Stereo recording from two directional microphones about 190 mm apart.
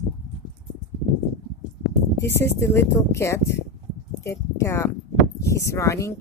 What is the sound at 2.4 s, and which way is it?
Speech, 15° left (ahead or behind).